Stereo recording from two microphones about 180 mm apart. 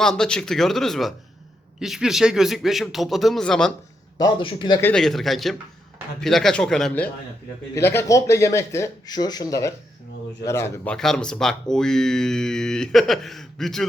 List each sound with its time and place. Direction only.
0.0 s speech: 5° left (ahead or behind)
4.2 s a man's voice: 25° left (ahead or behind)
4.8 s speech: 5° left (ahead or behind)
10.9 s speech: 5° left (ahead or behind)